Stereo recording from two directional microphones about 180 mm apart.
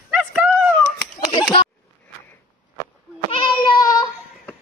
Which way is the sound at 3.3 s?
30° left (ahead or behind).